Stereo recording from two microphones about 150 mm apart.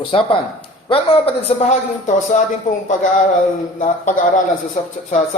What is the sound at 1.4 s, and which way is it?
A man's voice, 50° left (ahead or behind).